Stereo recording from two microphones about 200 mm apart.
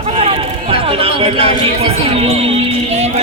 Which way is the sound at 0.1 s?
30° right (ahead or behind).